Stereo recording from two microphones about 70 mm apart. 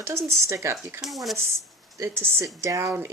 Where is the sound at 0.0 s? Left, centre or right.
Right.